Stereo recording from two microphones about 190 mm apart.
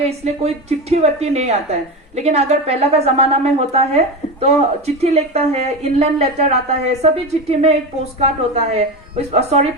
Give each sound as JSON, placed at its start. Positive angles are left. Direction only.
{"t": 0.0, "sound": "a woman's voice", "side_deg": -35}